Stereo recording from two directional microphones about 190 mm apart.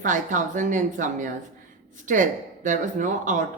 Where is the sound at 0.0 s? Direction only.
40° right (ahead or behind).